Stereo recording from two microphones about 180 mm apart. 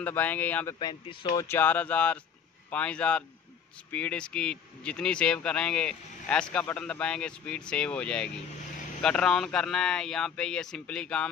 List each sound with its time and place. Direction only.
0.0 s speech: 10° left (ahead or behind)
0.7 s speech: 25° left (ahead or behind); by 11.2 s 5° left (ahead or behind)